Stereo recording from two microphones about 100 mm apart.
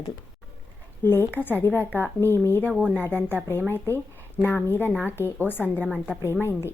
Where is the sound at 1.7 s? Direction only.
20° right (ahead or behind).